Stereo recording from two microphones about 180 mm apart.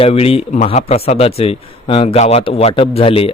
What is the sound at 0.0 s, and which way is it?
Speech, 35° left (ahead or behind).